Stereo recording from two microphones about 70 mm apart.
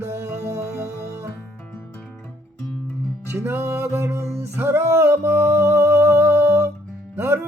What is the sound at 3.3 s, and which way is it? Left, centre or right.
Music, right.